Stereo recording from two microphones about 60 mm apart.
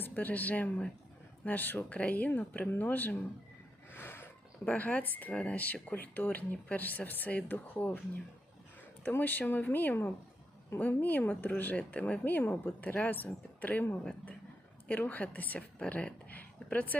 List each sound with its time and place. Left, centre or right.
0.1 s speech: left
3.9 s a sound: left
4.7 s speech: left
9.1 s speech: left
14.8 s speech: left